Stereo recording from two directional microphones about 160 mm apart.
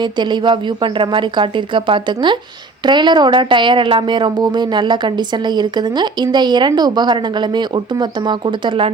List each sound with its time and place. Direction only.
0.0 s a woman's voice: 30° right (ahead or behind)